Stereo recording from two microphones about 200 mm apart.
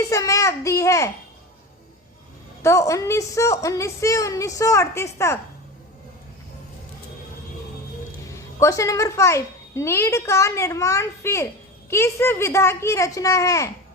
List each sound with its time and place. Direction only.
0.0 s a woman's voice: 15° left (ahead or behind)
2.6 s a woman's voice: 15° left (ahead or behind)
8.4 s a woman's voice: 15° left (ahead or behind)